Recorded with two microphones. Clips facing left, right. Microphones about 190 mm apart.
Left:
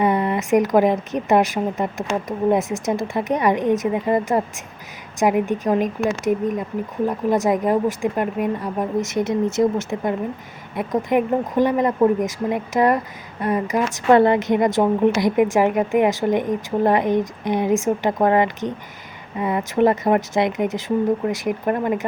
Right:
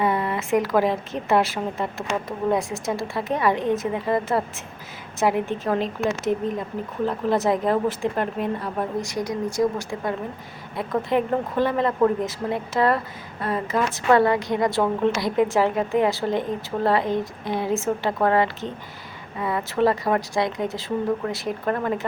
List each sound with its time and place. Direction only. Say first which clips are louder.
0.0 s a woman's voice: left 4 dB; 20° left (ahead or behind)
7.0 s a woman's voice: left 2 dB; 15° left (ahead or behind)